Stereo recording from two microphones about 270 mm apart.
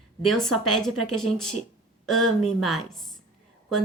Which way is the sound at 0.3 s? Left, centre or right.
Centre.